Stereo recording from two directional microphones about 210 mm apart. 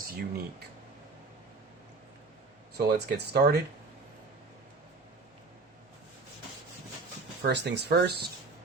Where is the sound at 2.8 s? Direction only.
50° right (ahead or behind).